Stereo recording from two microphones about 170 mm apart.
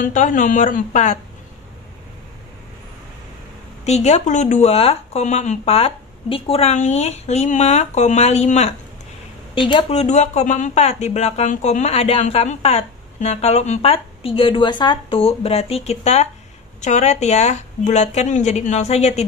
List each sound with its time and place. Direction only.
0.0 s speech: 50° left (ahead or behind)
3.8 s speech: 40° left (ahead or behind)
9.6 s speech: 30° left (ahead or behind)